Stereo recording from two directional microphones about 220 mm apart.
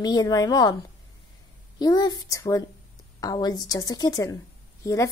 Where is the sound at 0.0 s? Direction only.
15° left (ahead or behind).